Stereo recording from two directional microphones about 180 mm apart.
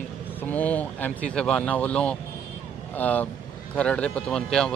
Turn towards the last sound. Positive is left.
turn(degrees=5)  # may be behind; listen again after turning